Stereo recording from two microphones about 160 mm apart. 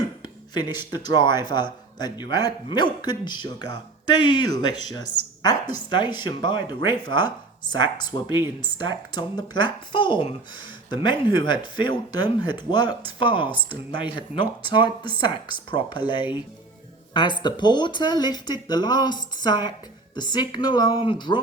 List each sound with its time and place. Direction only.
0.5 s a man's voice: 25° left (ahead or behind)
14.6 s a man's voice: 30° left (ahead or behind)